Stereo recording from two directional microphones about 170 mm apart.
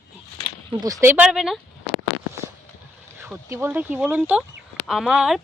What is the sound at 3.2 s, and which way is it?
Speech, 15° right (ahead or behind).